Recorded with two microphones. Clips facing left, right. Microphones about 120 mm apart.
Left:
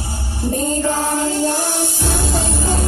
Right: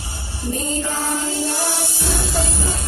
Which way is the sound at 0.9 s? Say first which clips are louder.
Left 5 dB; 45° left (ahead or behind).